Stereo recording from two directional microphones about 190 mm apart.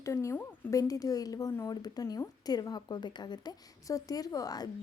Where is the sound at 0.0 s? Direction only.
15° left (ahead or behind).